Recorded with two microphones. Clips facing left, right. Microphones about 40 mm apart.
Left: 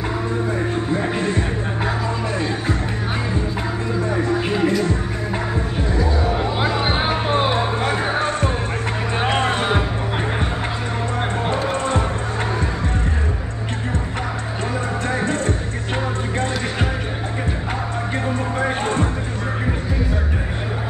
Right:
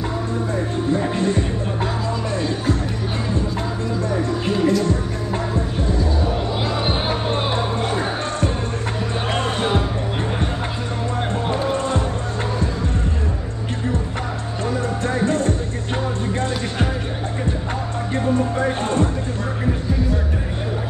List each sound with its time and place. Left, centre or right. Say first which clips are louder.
0.9 s music: right 2 dB; centre
4.1 s music: left 2 dB; left
6.2 s music: left 2 dB; centre
11.4 s music: right 1 dB; centre
14.7 s music: right 2 dB; centre
18.1 s music: right 5 dB; centre